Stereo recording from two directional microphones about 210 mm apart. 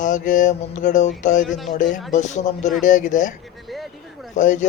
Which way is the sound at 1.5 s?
Centre (ahead or behind).